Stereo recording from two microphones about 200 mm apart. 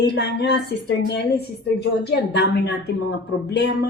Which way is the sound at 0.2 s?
55° left (ahead or behind).